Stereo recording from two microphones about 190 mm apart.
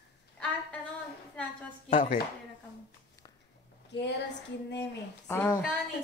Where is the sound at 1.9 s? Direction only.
45° left (ahead or behind).